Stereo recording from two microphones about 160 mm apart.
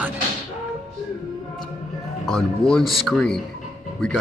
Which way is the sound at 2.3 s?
5° left (ahead or behind).